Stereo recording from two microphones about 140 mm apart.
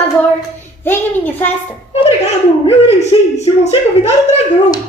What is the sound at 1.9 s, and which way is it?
A man's voice, 45° left (ahead or behind).